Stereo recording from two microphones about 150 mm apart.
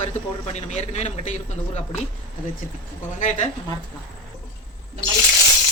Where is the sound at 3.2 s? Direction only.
55° left (ahead or behind).